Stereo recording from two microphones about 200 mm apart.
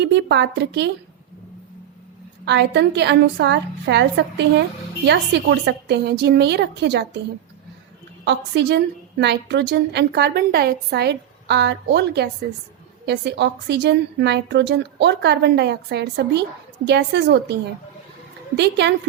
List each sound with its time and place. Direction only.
0.0 s a woman's voice: 60° right (ahead or behind)
2.4 s a woman's voice: 60° right (ahead or behind)
8.2 s a woman's voice: 60° right (ahead or behind)
18.5 s a woman's voice: 60° right (ahead or behind)